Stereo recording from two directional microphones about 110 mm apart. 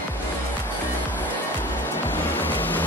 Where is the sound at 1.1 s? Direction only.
20° left (ahead or behind).